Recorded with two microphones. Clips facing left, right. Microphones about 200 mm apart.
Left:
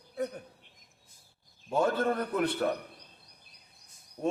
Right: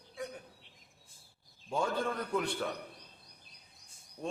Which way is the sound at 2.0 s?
55° left (ahead or behind).